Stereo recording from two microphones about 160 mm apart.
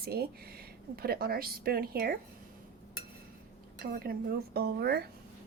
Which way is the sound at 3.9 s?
70° right (ahead or behind).